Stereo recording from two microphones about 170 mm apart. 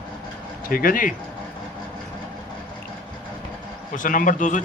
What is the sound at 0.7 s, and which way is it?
Speech, 60° left (ahead or behind).